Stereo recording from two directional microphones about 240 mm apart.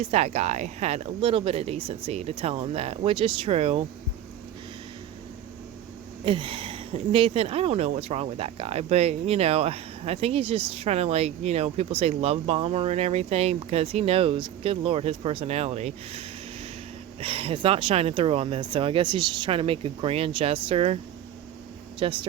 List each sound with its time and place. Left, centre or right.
0.0 s speech: right
6.2 s speech: right